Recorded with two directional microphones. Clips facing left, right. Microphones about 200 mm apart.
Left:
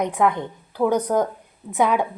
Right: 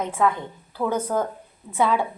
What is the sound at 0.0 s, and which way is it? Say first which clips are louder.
Speech: left 2 dB; 20° left (ahead or behind).